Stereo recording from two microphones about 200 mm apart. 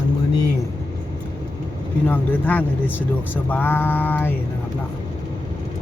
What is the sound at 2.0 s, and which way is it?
Speech, 10° left (ahead or behind).